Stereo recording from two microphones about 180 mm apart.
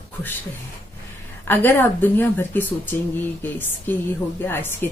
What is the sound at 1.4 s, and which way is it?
A woman's voice, 10° left (ahead or behind).